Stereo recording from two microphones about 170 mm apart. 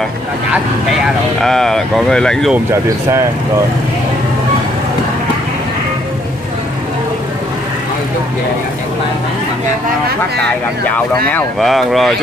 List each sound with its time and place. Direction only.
1.0 s speech: centre (ahead or behind)
2.5 s speech: 15° right (ahead or behind)
11.2 s speech: 5° left (ahead or behind)